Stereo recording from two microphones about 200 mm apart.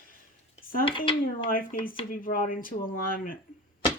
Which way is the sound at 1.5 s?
45° left (ahead or behind).